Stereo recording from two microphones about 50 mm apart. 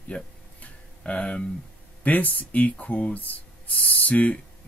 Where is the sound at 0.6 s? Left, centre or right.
Left.